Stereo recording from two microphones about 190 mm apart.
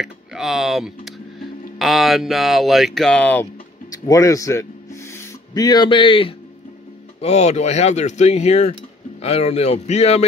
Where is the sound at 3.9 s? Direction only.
20° left (ahead or behind); by 10.2 s 35° left (ahead or behind).